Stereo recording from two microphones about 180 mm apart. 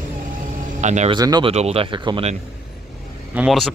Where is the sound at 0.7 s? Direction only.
40° right (ahead or behind).